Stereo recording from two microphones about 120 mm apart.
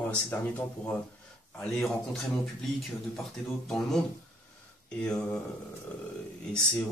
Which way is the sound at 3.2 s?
5° left (ahead or behind).